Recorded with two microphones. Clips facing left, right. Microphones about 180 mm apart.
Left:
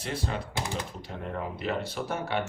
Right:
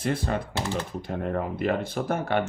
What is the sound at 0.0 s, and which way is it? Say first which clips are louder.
Speech: right 6 dB; 55° right (ahead or behind).